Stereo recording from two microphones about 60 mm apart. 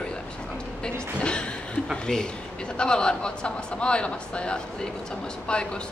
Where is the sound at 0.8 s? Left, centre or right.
Centre.